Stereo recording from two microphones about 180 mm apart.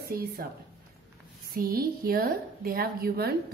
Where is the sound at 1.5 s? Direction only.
55° right (ahead or behind).